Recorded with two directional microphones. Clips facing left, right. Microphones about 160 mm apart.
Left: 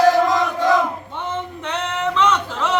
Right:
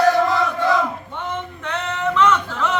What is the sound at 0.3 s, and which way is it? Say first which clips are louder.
Battle cry: left 2 dB; 15° left (ahead or behind).